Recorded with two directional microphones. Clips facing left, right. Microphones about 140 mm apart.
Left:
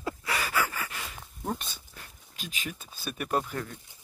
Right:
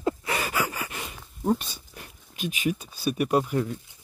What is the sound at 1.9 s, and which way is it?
Speech, 20° right (ahead or behind).